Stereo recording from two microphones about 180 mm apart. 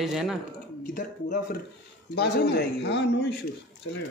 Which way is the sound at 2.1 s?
65° left (ahead or behind).